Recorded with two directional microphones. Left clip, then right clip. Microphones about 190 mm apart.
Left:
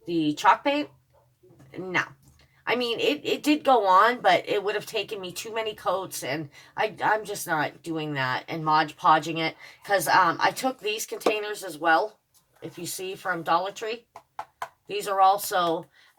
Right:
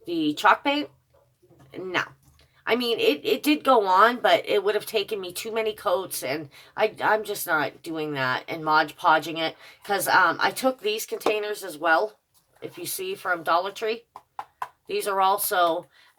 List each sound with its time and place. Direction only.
0.0 s speech: 35° right (ahead or behind)